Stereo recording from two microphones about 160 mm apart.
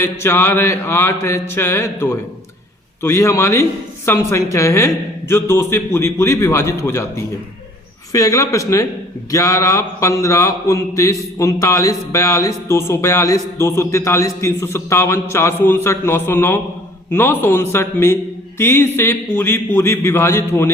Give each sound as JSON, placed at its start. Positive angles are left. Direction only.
{"t": 0.0, "sound": "a man's voice", "side_deg": 15}